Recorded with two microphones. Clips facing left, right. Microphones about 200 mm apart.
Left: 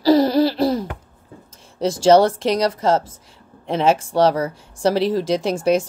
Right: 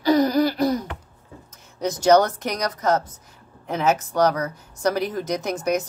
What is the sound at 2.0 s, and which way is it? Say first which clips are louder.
Speech: left 3 dB; 30° left (ahead or behind).